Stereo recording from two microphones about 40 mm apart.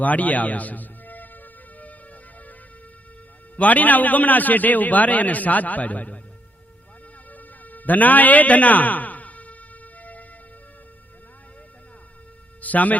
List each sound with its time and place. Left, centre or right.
0.0 s speech: left
3.6 s a man's voice: left
7.3 s music: left
12.6 s speech: left